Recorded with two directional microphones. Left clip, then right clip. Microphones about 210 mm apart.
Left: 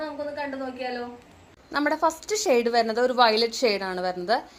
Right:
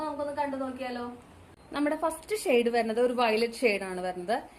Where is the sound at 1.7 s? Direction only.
15° left (ahead or behind).